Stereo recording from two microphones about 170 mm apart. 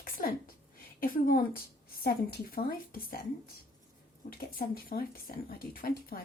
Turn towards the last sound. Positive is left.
turn(degrees=60)  # may be behind; listen again after turning